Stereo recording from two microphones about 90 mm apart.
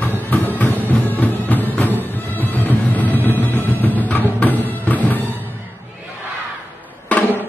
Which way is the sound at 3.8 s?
20° left (ahead or behind).